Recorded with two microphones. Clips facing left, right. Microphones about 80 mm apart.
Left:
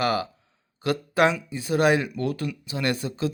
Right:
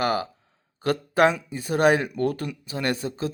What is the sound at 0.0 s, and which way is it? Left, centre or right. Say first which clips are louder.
Speech: even; right.